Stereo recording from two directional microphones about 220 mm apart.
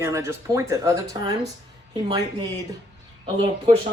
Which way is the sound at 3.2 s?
20° right (ahead or behind).